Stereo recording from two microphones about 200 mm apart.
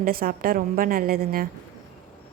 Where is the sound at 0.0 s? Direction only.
50° right (ahead or behind).